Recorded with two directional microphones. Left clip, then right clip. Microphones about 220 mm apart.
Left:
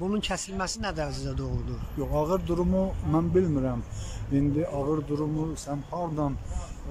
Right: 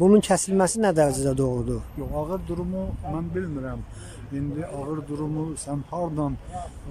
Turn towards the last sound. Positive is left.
turn(degrees=-10)  # may be behind; listen again after turning